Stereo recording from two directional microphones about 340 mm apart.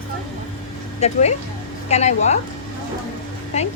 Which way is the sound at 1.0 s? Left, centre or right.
Centre.